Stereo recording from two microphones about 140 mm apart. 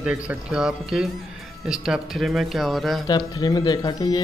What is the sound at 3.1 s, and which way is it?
Speech, 30° left (ahead or behind).